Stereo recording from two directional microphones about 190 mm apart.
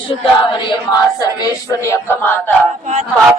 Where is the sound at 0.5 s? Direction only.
25° left (ahead or behind).